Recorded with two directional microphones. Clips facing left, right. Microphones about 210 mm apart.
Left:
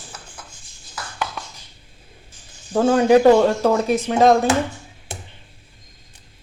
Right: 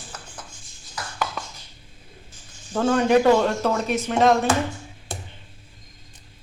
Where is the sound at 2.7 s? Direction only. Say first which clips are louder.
Left 4 dB; 30° left (ahead or behind).